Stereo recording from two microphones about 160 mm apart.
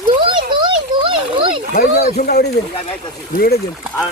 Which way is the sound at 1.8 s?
65° left (ahead or behind).